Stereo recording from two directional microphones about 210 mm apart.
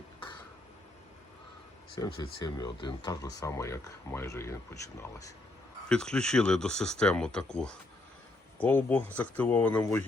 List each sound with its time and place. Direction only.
2.0 s speech: 15° left (ahead or behind)
5.9 s speech: 5° left (ahead or behind)